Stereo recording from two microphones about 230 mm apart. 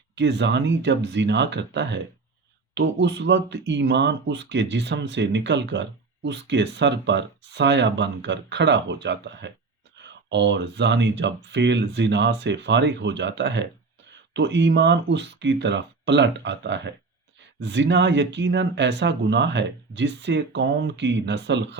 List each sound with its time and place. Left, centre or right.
0.2 s speech: right